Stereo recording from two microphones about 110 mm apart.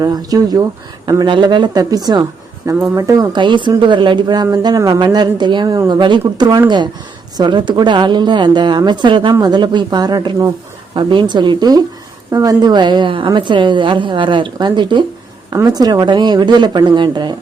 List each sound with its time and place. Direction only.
0.0 s a woman's voice: 35° right (ahead or behind)
10.9 s a woman's voice: 45° right (ahead or behind)
15.5 s speech: 35° right (ahead or behind)